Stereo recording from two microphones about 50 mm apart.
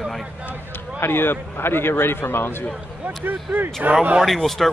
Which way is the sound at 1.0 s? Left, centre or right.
Left.